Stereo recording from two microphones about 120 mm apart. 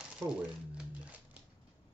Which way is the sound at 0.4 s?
10° right (ahead or behind).